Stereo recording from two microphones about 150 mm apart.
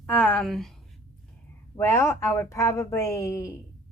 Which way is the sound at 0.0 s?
10° left (ahead or behind).